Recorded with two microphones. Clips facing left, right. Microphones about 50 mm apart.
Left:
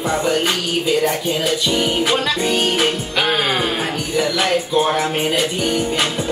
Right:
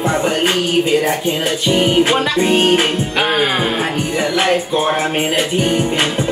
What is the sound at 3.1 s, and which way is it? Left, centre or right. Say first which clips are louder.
Music: right 3 dB; centre.